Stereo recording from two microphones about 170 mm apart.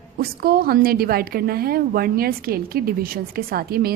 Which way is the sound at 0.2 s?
60° right (ahead or behind).